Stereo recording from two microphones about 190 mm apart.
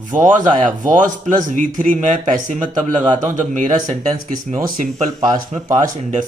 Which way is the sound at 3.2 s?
40° right (ahead or behind).